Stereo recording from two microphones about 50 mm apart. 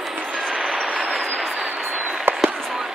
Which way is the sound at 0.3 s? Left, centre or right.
Centre.